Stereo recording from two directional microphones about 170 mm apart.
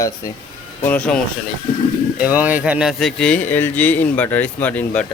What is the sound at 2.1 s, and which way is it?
Speech, 10° right (ahead or behind).